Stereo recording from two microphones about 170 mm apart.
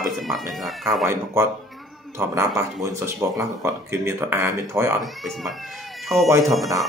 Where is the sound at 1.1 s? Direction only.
15° right (ahead or behind).